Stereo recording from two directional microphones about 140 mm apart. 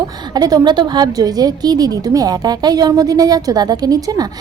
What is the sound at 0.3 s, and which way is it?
A woman's voice, 25° right (ahead or behind).